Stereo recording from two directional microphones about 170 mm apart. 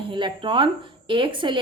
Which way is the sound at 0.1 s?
30° right (ahead or behind).